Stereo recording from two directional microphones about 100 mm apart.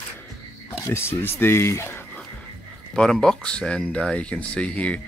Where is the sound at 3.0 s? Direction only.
5° left (ahead or behind).